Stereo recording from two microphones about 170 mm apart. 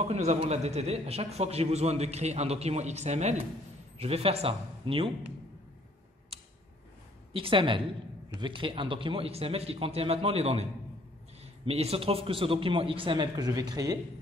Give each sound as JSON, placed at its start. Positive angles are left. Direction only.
{"t": 0.1, "sound": "a man's voice", "side_deg": -40}
{"t": 7.3, "sound": "a man's voice", "side_deg": -30}
{"t": 11.6, "sound": "a man's voice", "side_deg": -35}